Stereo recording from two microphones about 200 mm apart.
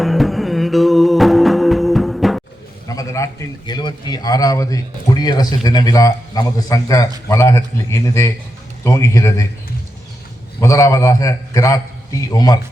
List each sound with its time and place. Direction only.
0.0 s music: centre (ahead or behind)
2.8 s a man's voice: 15° left (ahead or behind)
10.6 s a man's voice: 15° left (ahead or behind)